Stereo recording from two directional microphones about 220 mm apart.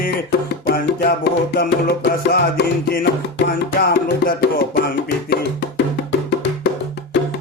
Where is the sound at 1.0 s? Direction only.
45° left (ahead or behind).